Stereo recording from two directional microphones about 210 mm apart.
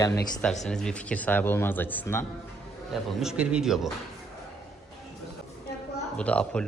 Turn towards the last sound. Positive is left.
turn(degrees=5)  # may be behind; listen again after turning